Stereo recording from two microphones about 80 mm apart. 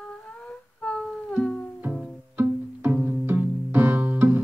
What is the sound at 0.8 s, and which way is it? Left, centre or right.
Music, centre.